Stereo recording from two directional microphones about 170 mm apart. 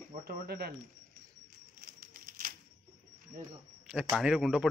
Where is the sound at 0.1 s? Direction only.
60° right (ahead or behind).